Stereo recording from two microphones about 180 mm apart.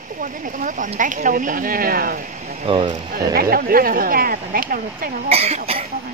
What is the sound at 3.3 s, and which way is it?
Speech, 55° right (ahead or behind).